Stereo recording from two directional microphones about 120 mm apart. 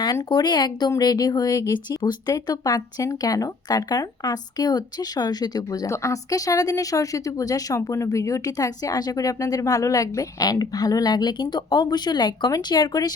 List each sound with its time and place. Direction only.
0.3 s speech: 35° left (ahead or behind)